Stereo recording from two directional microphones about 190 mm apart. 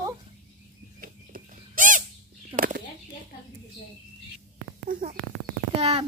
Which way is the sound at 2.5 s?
45° right (ahead or behind).